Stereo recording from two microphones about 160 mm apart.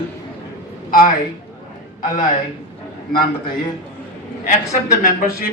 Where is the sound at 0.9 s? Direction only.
60° left (ahead or behind).